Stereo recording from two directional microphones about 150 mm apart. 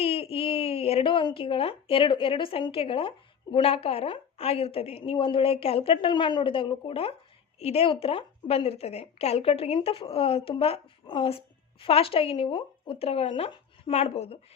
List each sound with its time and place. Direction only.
0.0 s a woman's voice: 40° left (ahead or behind)